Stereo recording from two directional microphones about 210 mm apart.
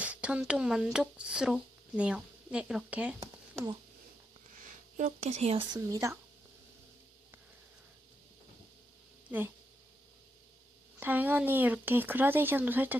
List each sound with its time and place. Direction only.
0.0 s speech: 5° right (ahead or behind)
4.5 s speech: 40° right (ahead or behind); by 6.1 s 15° right (ahead or behind)
11.0 s speech: 10° right (ahead or behind)